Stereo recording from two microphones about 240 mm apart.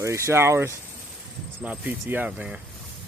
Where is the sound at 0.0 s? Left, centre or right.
Centre.